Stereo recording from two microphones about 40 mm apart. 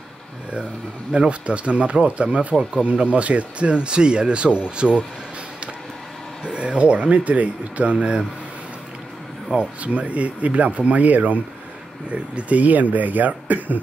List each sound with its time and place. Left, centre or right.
1.1 s speech: right
6.5 s speech: right
9.8 s speech: right